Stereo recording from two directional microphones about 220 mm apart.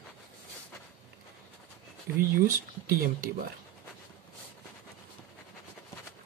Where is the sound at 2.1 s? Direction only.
50° right (ahead or behind).